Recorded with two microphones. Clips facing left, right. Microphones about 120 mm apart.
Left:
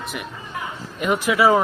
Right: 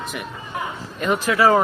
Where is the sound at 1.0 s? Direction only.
15° left (ahead or behind).